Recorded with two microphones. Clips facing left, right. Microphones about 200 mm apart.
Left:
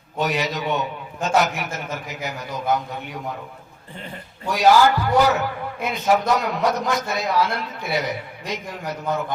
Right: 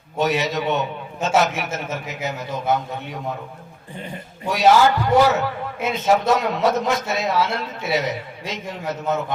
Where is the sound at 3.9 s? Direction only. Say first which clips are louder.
Right 3 dB; 15° right (ahead or behind).